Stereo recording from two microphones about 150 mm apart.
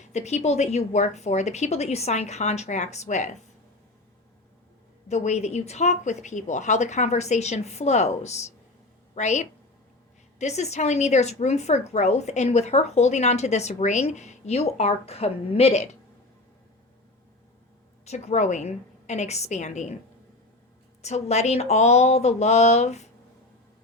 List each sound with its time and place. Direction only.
0.1 s a woman's voice: 50° left (ahead or behind)
5.0 s a woman's voice: 50° left (ahead or behind)
18.0 s a woman's voice: 45° left (ahead or behind)
21.0 s a woman's voice: 50° left (ahead or behind)